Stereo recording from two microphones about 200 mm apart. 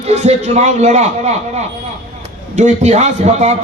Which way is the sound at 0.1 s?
35° right (ahead or behind).